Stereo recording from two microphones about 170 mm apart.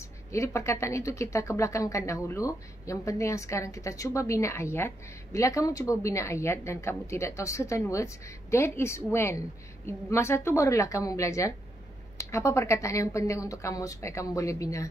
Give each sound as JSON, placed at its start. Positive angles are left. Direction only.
{"t": 0.3, "sound": "speech", "side_deg": 15}